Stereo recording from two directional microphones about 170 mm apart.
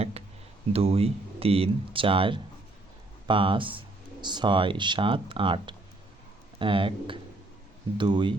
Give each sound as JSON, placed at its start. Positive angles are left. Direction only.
{"t": 0.7, "sound": "speech", "side_deg": -35}